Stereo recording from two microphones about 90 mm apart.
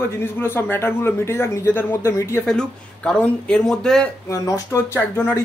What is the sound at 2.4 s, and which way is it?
Speech, 10° left (ahead or behind).